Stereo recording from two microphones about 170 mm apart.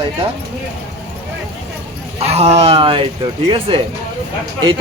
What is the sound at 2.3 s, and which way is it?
Speech, 40° right (ahead or behind).